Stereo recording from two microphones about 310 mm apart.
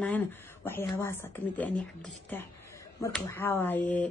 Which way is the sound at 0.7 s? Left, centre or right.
Centre.